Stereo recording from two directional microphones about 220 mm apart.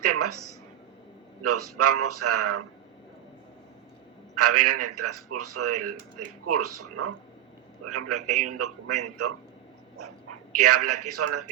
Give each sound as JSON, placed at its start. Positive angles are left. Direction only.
{"t": 0.0, "sound": "a sound", "side_deg": -90}
{"t": 1.4, "sound": "a man's voice", "side_deg": -90}
{"t": 4.4, "sound": "a man's voice", "side_deg": -90}
{"t": 10.6, "sound": "a man's voice", "side_deg": -90}